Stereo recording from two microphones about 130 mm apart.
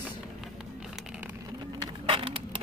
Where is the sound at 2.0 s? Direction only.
45° right (ahead or behind).